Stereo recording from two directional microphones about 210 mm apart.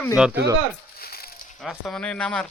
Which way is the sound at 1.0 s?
45° left (ahead or behind).